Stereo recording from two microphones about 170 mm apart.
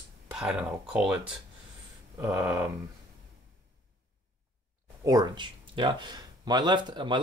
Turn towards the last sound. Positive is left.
turn(degrees=-30)  # may be behind; listen again after turning